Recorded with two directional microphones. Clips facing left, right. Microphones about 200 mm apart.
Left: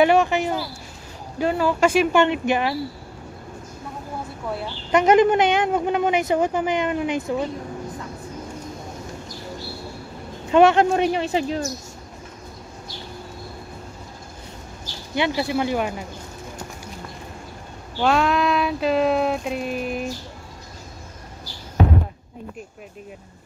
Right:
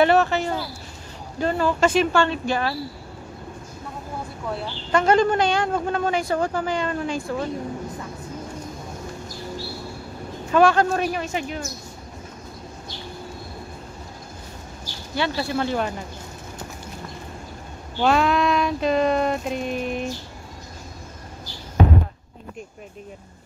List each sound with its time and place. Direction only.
0.0 s a woman's voice: 15° left (ahead or behind)
4.9 s a woman's voice: 20° left (ahead or behind)
10.5 s speech: 20° left (ahead or behind)
15.1 s a woman's voice: 15° left (ahead or behind)
18.0 s a sound: centre (ahead or behind)